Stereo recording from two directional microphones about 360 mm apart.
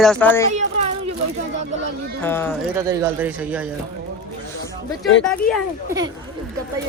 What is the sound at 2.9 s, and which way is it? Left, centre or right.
Speech, centre.